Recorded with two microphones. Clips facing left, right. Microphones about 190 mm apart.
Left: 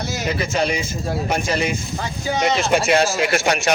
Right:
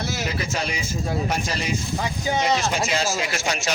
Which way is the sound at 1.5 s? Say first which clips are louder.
Left 5 dB; 55° left (ahead or behind).